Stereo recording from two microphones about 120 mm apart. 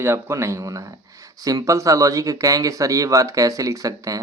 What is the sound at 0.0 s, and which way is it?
Speech, 20° right (ahead or behind).